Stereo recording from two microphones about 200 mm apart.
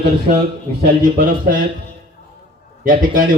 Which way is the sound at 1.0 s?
40° right (ahead or behind).